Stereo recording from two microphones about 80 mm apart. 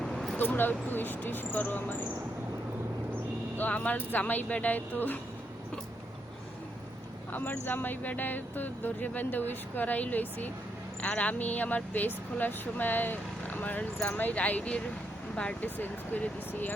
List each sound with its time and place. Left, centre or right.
0.0 s a sound: centre
0.3 s speech: left
3.6 s speech: centre
7.3 s speech: left